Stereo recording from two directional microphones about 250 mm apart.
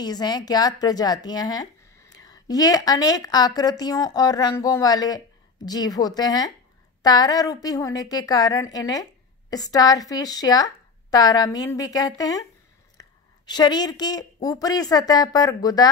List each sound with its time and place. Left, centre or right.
0.0 s a woman's voice: centre
13.0 s a sound: centre
13.5 s a woman's voice: centre